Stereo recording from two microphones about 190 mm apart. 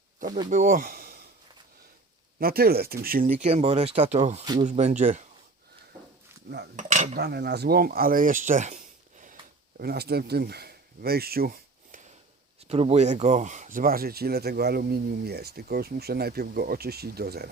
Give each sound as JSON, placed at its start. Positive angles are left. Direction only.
{"t": 0.5, "sound": "speech", "side_deg": -45}
{"t": 2.4, "sound": "speech", "side_deg": -55}
{"t": 6.7, "sound": "speech", "side_deg": -40}
{"t": 7.2, "sound": "speech", "side_deg": -60}
{"t": 12.5, "sound": "speech", "side_deg": -30}